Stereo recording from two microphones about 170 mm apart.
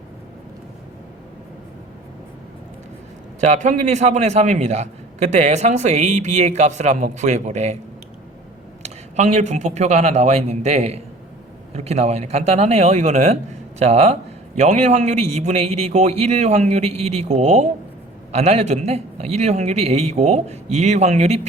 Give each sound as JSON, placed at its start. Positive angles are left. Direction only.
{"t": 3.4, "sound": "a man's voice", "side_deg": -45}
{"t": 8.8, "sound": "speech", "side_deg": -40}